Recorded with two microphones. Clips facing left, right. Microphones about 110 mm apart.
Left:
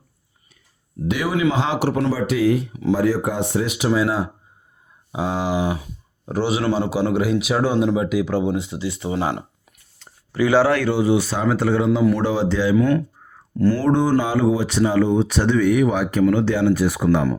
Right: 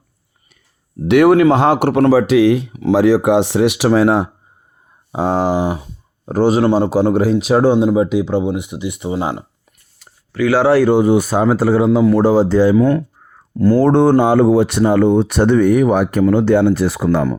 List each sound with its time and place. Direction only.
1.0 s speech: 65° right (ahead or behind)
5.1 s speech: 45° right (ahead or behind); by 9.1 s 20° right (ahead or behind)
10.0 s a sound: 5° right (ahead or behind)
10.7 s speech: 35° right (ahead or behind)
10.9 s speech: 50° right (ahead or behind)
13.8 s speech: 65° right (ahead or behind)